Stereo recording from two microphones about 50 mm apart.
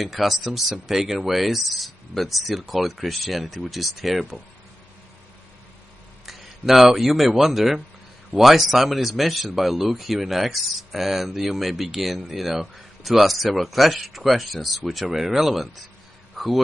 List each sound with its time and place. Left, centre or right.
0.0 s speech: centre
6.2 s speech: centre
16.3 s a sound: centre